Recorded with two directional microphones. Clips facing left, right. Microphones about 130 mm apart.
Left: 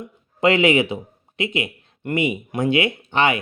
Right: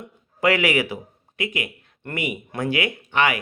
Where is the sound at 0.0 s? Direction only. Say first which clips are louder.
Left 3 dB; 25° left (ahead or behind).